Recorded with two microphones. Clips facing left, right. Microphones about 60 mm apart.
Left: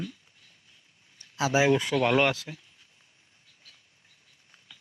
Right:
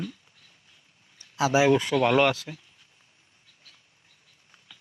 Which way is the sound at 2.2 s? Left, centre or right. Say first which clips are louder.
Right 3 dB; left.